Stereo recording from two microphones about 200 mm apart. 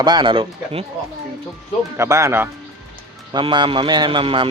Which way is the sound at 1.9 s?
15° right (ahead or behind).